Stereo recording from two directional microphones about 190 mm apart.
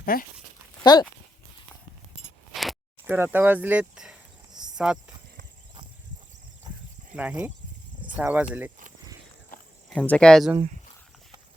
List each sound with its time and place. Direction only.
0.0 s speech: 50° left (ahead or behind)
0.9 s speech: 25° left (ahead or behind)
2.5 s a sound: centre (ahead or behind)
4.7 s speech: 5° right (ahead or behind)
7.2 s speech: 5° right (ahead or behind)
9.9 s speech: 5° left (ahead or behind)